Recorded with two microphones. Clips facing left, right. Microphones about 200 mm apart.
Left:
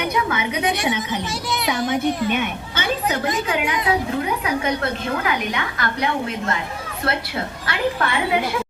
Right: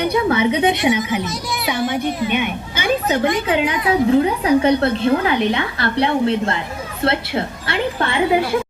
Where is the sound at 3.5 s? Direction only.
25° right (ahead or behind).